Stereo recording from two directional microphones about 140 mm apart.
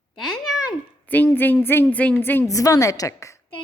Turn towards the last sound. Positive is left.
turn(degrees=25)  # may be behind; listen again after turning